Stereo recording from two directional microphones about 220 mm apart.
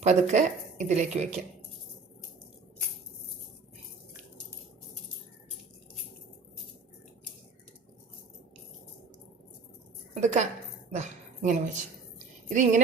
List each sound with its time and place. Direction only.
0.0 s speech: 30° right (ahead or behind)
10.2 s a woman's voice: 30° right (ahead or behind)